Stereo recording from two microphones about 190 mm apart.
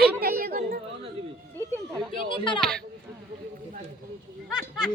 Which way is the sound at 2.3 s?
25° left (ahead or behind).